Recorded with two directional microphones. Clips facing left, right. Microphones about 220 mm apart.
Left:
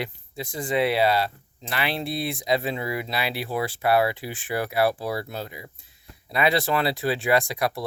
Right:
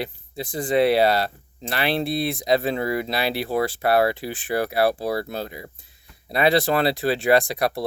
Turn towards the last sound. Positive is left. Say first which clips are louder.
# right 4 dB
turn(degrees=-35)  # may be behind; listen again after turning